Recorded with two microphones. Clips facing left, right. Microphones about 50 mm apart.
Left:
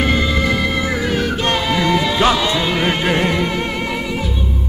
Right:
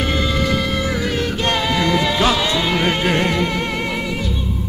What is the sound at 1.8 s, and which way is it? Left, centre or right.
Music, left.